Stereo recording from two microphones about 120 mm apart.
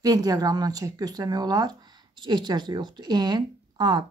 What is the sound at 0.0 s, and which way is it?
Speech, 30° right (ahead or behind).